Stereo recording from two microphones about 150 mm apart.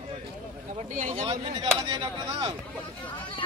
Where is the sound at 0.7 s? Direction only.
55° right (ahead or behind).